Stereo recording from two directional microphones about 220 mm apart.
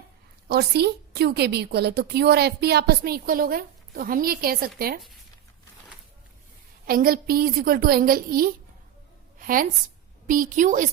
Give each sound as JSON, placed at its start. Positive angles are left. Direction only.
{"t": 0.4, "sound": "a woman's voice", "side_deg": -45}
{"t": 6.8, "sound": "a woman's voice", "side_deg": -40}